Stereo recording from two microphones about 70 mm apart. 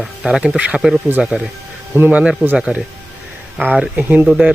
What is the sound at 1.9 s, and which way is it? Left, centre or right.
Speech, right.